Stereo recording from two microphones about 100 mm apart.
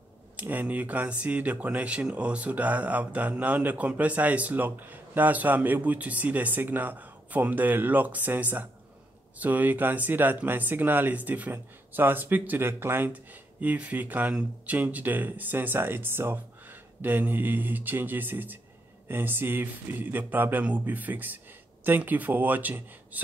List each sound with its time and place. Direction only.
0.4 s speech: 15° right (ahead or behind)